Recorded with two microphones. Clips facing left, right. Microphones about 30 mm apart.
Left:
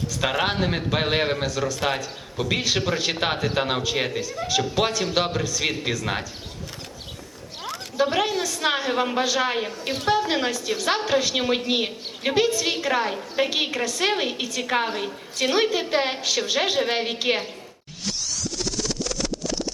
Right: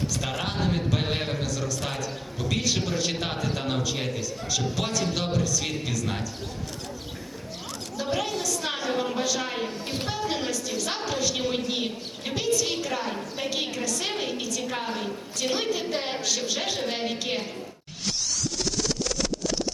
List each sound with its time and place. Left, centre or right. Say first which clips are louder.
0.2 s a woman's voice: left 6 dB; left
7.9 s a woman's voice: left 6 dB; left
14.6 s a woman's voice: left 7 dB; left
14.8 s a woman's voice: left 2 dB; left
18.0 s scratch: even; centre